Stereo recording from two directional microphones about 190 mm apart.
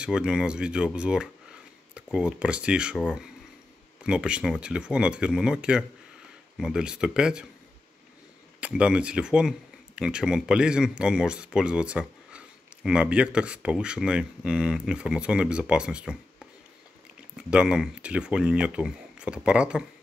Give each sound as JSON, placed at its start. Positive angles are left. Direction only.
{"t": 0.0, "sound": "speech", "side_deg": -5}
{"t": 8.5, "sound": "speech", "side_deg": -5}
{"t": 17.4, "sound": "speech", "side_deg": -5}